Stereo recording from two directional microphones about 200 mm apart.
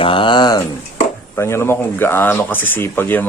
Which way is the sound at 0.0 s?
25° left (ahead or behind).